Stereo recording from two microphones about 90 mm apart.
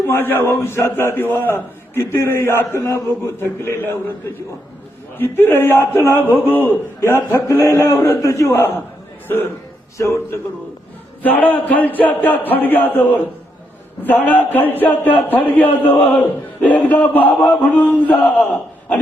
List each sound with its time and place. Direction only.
0.0 s a man's voice: 25° left (ahead or behind)
5.1 s a man's voice: 25° left (ahead or behind)
11.2 s a man's voice: 20° left (ahead or behind)